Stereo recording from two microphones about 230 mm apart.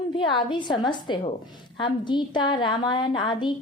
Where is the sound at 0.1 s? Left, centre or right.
Left.